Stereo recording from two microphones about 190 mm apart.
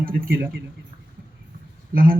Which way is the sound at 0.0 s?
50° right (ahead or behind).